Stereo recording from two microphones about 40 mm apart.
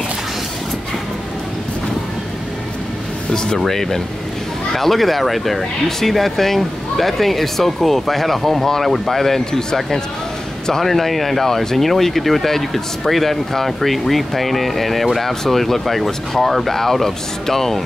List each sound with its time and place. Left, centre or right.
3.3 s music: centre
3.5 s speech: centre
10.8 s speech: centre